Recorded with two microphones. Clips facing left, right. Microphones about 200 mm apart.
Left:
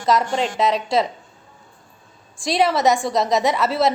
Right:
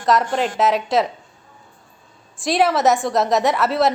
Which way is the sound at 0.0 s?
Centre (ahead or behind).